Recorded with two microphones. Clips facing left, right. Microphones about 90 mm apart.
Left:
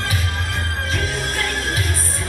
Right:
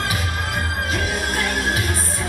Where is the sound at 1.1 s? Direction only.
15° right (ahead or behind).